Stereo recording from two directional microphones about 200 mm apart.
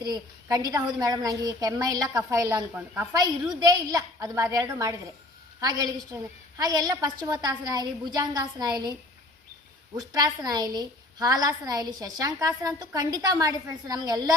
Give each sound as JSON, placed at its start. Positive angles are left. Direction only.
{"t": 0.0, "sound": "a woman's voice", "side_deg": -20}
{"t": 3.2, "sound": "a woman's voice", "side_deg": -20}